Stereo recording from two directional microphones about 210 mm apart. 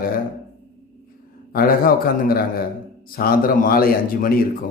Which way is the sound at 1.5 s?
45° left (ahead or behind).